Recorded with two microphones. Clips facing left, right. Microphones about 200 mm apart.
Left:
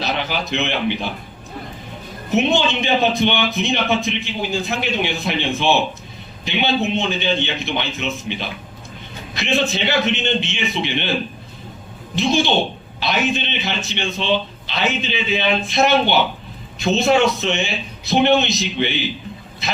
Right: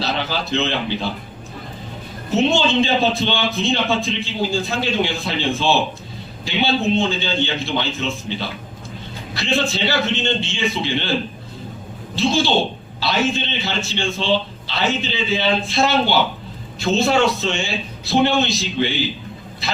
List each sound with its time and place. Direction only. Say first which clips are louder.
0.0 s a man's voice: even; 15° left (ahead or behind)
2.3 s a man's voice: right 1 dB; 20° left (ahead or behind)
12.1 s a man's voice: even; 20° left (ahead or behind)